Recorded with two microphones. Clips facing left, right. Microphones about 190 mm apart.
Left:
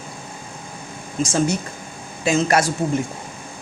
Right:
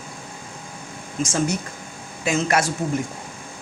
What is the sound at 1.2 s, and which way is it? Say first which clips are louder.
Speech: left 3 dB; 35° left (ahead or behind).